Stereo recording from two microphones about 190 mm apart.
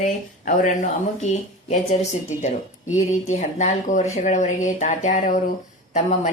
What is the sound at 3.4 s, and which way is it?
Speech, 40° left (ahead or behind).